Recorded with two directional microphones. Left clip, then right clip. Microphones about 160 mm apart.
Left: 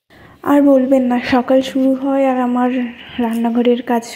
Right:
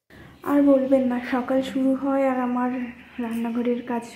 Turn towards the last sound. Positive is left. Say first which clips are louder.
# left 11 dB
turn(degrees=40)  # may be behind; listen again after turning